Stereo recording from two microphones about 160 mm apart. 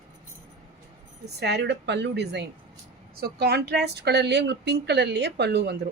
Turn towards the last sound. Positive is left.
turn(degrees=-90)